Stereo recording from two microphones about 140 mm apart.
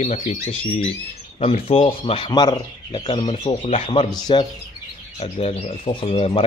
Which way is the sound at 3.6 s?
45° left (ahead or behind).